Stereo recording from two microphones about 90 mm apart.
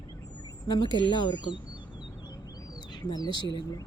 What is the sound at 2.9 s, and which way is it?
Speech, 50° left (ahead or behind).